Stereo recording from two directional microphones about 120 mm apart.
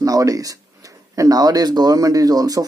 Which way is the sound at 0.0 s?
30° right (ahead or behind).